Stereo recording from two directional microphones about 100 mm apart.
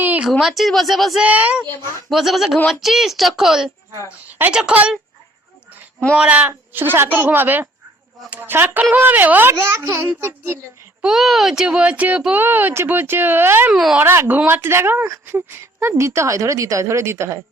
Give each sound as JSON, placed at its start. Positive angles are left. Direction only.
{"t": 0.0, "sound": "a sound", "side_deg": -15}
{"t": 0.3, "sound": "speech", "side_deg": 0}
{"t": 1.2, "sound": "speech", "side_deg": -15}
{"t": 2.0, "sound": "speech", "side_deg": 0}
{"t": 6.1, "sound": "speech", "side_deg": -15}
{"t": 9.6, "sound": "speech", "side_deg": -30}
{"t": 11.0, "sound": "speech", "side_deg": -5}
{"t": 13.7, "sound": "speech", "side_deg": -10}
{"t": 14.0, "sound": "speech", "side_deg": -20}